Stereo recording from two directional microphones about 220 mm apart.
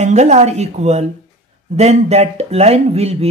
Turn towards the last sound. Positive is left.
turn(degrees=-30)  # may be behind; listen again after turning